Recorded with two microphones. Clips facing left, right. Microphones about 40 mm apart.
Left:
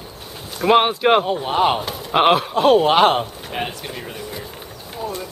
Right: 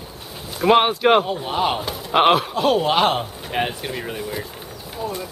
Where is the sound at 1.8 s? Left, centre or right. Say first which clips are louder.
Even; centre.